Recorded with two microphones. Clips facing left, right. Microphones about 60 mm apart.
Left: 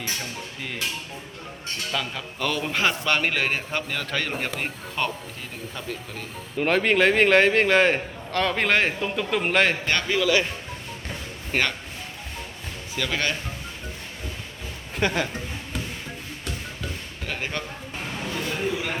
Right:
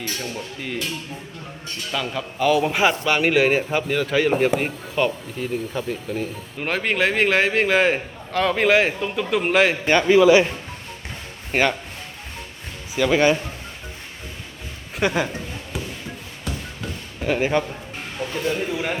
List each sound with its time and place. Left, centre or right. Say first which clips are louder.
1.9 s a man's voice: right 5 dB; centre
9.8 s a man's voice: right 9 dB; centre
11.5 s speech: right 5 dB; centre
13.0 s speech: right 9 dB; centre
15.0 s speech: right 3 dB; centre
17.2 s a man's voice: right 10 dB; centre